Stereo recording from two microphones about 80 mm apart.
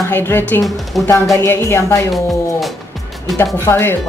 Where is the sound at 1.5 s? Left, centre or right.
Left.